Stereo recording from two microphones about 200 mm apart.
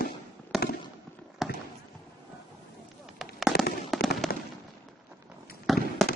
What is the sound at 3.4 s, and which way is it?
Fireworks, centre (ahead or behind).